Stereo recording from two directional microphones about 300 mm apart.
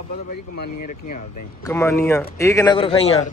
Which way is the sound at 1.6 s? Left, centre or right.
Centre.